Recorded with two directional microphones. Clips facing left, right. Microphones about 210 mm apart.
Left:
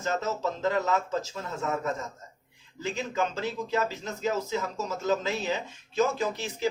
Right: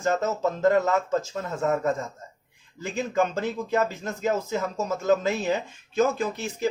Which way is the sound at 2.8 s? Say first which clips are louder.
Right 4 dB; 50° right (ahead or behind).